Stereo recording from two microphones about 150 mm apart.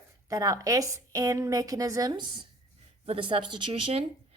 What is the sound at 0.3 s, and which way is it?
A woman's voice, 20° right (ahead or behind).